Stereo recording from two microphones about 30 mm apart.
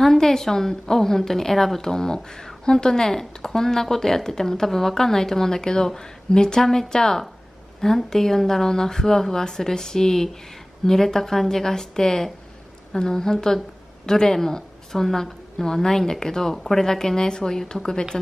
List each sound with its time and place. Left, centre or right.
0.0 s speech: centre
1.8 s a woman's voice: centre